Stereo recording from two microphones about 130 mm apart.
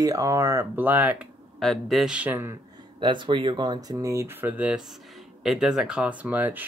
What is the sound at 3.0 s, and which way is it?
Speech, 40° right (ahead or behind).